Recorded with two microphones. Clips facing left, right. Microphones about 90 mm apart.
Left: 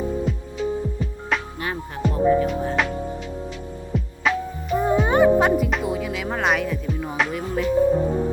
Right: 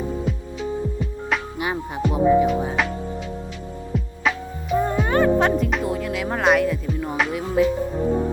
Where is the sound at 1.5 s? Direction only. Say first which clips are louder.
Right 3 dB; 15° right (ahead or behind).